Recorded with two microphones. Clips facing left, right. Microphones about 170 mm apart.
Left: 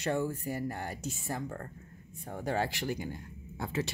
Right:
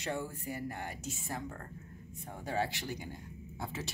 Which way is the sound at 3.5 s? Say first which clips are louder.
Left 5 dB; 65° left (ahead or behind).